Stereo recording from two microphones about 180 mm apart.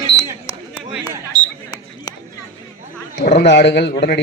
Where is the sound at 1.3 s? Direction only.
50° left (ahead or behind).